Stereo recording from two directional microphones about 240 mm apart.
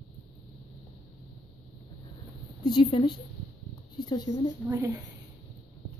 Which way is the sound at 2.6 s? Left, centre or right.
Centre.